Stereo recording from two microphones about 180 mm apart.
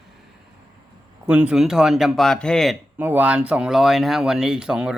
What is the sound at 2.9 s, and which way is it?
Speech, 10° right (ahead or behind).